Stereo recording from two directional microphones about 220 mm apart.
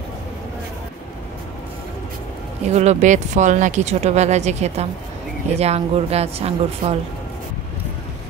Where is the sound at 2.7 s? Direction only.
30° right (ahead or behind).